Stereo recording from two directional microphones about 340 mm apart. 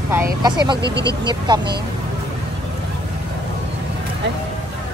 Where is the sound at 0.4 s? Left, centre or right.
Centre.